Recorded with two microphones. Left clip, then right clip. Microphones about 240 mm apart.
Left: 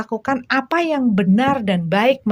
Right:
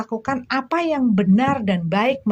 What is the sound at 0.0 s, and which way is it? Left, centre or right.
Speech, left.